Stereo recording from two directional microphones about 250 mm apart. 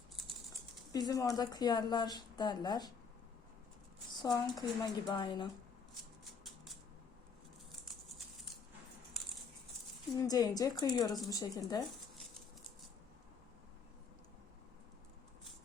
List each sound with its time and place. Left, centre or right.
0.9 s speech: centre
4.2 s speech: centre
10.2 s speech: centre